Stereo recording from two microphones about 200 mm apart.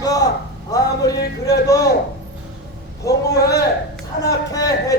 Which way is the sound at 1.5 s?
15° left (ahead or behind).